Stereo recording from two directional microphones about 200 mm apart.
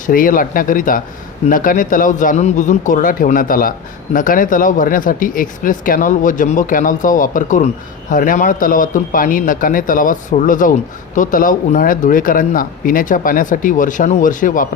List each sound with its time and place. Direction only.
0.0 s speech: 45° left (ahead or behind)